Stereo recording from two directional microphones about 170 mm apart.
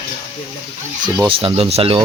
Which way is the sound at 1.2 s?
30° right (ahead or behind).